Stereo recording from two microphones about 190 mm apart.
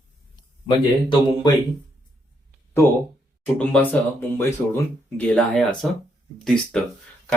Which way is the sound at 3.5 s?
10° left (ahead or behind).